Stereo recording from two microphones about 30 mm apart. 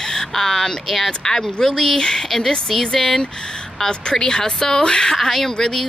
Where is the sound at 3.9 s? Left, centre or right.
Left.